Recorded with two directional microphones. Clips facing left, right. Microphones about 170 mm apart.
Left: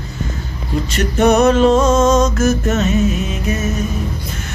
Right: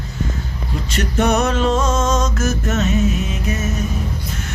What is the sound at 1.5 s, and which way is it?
Music, 35° left (ahead or behind).